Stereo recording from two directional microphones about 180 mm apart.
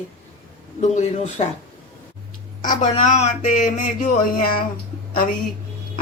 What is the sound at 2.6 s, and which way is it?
Speech, 45° left (ahead or behind).